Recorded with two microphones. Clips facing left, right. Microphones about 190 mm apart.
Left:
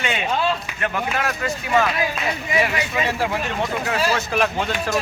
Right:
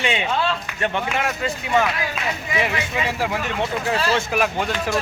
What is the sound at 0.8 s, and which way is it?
Speech, 25° right (ahead or behind).